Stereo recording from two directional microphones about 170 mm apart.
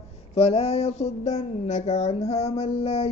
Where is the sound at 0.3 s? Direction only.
35° left (ahead or behind).